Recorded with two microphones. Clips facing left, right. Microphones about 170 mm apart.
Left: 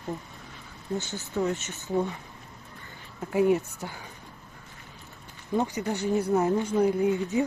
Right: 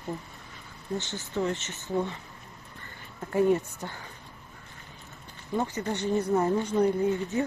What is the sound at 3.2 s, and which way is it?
Speech, 5° left (ahead or behind).